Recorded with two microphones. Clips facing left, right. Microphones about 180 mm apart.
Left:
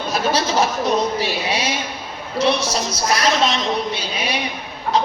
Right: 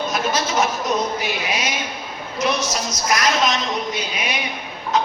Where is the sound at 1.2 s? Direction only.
30° left (ahead or behind).